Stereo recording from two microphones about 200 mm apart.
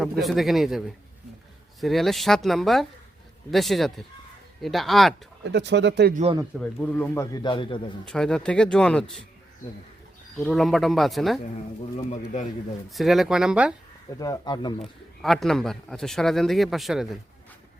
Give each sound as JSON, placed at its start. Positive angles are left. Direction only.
{"t": 0.0, "sound": "speech", "side_deg": 0}
{"t": 5.5, "sound": "speech", "side_deg": -60}
{"t": 6.6, "sound": "speech", "side_deg": 5}
{"t": 8.0, "sound": "speech", "side_deg": 5}
{"t": 10.3, "sound": "speech", "side_deg": 0}
{"t": 11.9, "sound": "speech", "side_deg": 35}
{"t": 12.9, "sound": "speech", "side_deg": 0}
{"t": 14.2, "sound": "speech", "side_deg": 20}
{"t": 15.2, "sound": "speech", "side_deg": 0}